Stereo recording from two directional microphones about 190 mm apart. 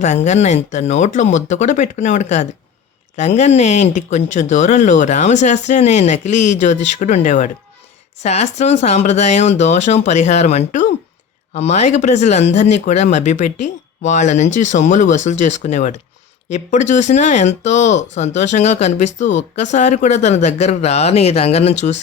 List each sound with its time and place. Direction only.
0.3 s speech: 40° left (ahead or behind)